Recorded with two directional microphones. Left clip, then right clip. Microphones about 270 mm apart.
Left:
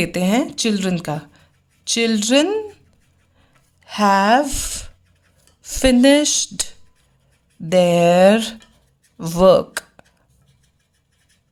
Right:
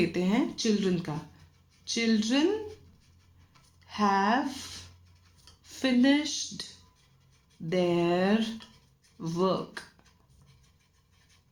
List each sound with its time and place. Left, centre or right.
0.0 s speech: left
3.8 s speech: left
7.7 s speech: left